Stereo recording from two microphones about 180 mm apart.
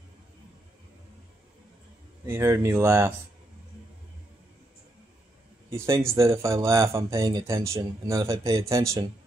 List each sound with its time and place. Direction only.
2.2 s speech: 15° right (ahead or behind)
5.7 s speech: 15° right (ahead or behind)